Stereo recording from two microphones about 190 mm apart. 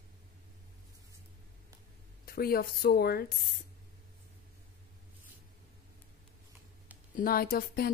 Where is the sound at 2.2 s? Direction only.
50° left (ahead or behind).